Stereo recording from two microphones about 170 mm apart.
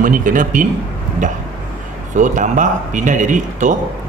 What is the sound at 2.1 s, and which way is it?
Speech, 45° right (ahead or behind).